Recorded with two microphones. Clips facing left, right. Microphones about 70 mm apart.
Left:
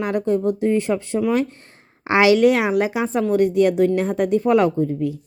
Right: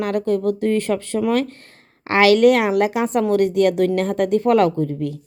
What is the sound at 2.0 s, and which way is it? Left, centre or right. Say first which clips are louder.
Speech: even; centre.